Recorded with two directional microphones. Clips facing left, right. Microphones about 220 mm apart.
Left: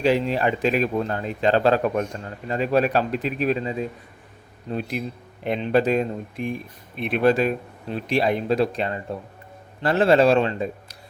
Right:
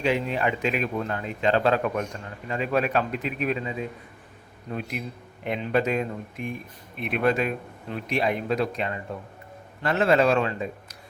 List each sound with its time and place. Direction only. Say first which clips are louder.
0.0 s speech: left 4 dB; 35° left (ahead or behind)